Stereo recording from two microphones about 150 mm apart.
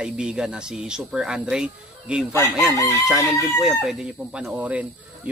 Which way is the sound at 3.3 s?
Centre (ahead or behind).